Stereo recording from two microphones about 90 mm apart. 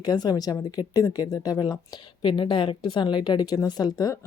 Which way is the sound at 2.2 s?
60° left (ahead or behind).